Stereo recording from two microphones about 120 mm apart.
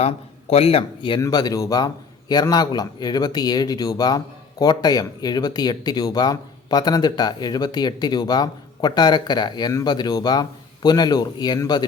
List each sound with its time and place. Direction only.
0.0 s speech: 55° left (ahead or behind)
1.2 s speech: 30° left (ahead or behind)